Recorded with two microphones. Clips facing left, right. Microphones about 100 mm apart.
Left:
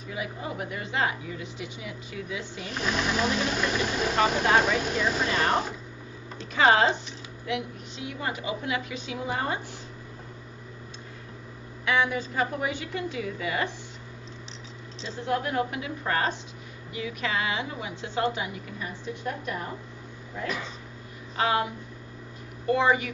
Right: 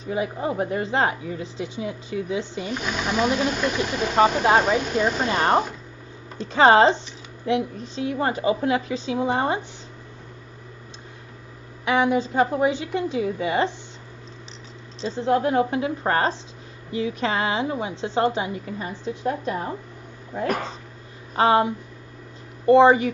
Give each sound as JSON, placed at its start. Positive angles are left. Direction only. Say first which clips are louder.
{"t": 0.0, "sound": "a woman's voice", "louder": "right 9 dB", "side_deg": -30}
{"t": 2.7, "sound": "speech", "louder": "right 1 dB", "side_deg": 0}
{"t": 4.4, "sound": "a woman's voice", "louder": "right 4 dB", "side_deg": -35}
{"t": 4.7, "sound": "speech", "louder": "right 5 dB", "side_deg": 0}
{"t": 5.2, "sound": "a woman's voice", "louder": "right 6 dB", "side_deg": -35}
{"t": 11.8, "sound": "a woman's voice", "louder": "right 6 dB", "side_deg": -25}
{"t": 15.0, "sound": "a woman's voice", "louder": "right 8 dB", "side_deg": -30}
{"t": 21.4, "sound": "a woman's voice", "louder": "right 7 dB", "side_deg": -30}